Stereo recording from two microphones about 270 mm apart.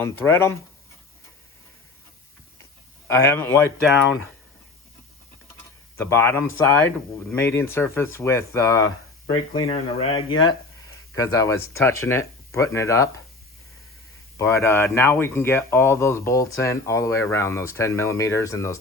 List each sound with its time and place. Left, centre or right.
0.0 s speech: centre
3.1 s speech: centre
6.0 s speech: centre
14.3 s speech: centre